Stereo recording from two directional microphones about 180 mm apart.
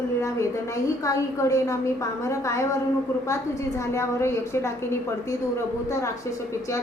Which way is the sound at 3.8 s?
15° left (ahead or behind).